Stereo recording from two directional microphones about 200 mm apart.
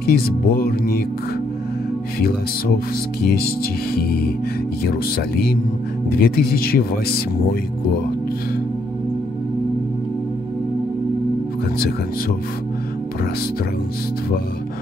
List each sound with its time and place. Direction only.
0.0 s speech: 50° left (ahead or behind)
2.1 s speech: 50° left (ahead or behind)